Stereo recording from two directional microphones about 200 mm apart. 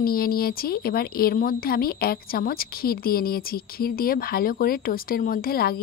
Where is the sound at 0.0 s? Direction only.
50° left (ahead or behind).